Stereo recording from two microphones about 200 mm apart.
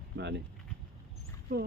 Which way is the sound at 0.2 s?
60° right (ahead or behind).